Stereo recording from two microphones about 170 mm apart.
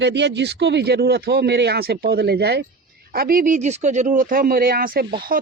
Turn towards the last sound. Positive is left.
turn(degrees=-60)  # may be behind; listen again after turning